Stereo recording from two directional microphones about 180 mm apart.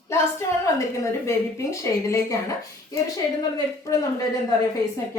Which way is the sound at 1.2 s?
15° left (ahead or behind).